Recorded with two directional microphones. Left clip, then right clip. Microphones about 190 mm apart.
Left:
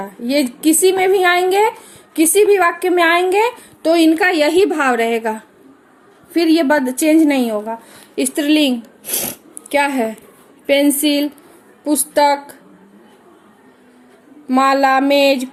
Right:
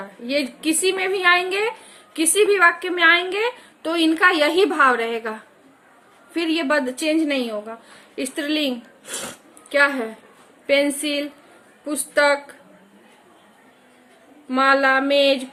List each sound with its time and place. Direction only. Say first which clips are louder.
0.3 s a woman's voice: left 7 dB; 15° left (ahead or behind)
14.5 s a woman's voice: left 4 dB; 15° left (ahead or behind)